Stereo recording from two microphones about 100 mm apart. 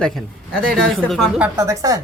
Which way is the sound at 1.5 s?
35° right (ahead or behind).